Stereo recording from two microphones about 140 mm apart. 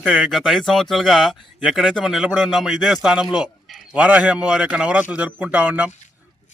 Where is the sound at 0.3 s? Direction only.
Centre (ahead or behind).